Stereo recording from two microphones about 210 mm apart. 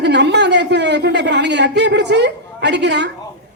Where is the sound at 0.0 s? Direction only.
55° right (ahead or behind).